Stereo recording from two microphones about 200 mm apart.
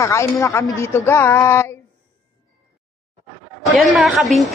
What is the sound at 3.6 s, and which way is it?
Speech, centre (ahead or behind).